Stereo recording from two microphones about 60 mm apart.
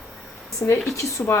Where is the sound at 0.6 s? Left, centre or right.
Left.